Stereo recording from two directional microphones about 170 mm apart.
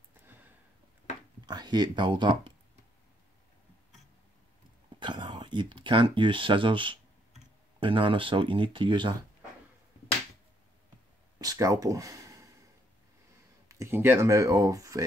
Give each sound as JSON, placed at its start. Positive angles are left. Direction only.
{"t": 1.4, "sound": "speech", "side_deg": -25}
{"t": 5.0, "sound": "speech", "side_deg": -25}
{"t": 11.3, "sound": "a sound", "side_deg": -20}
{"t": 13.7, "sound": "speech", "side_deg": -15}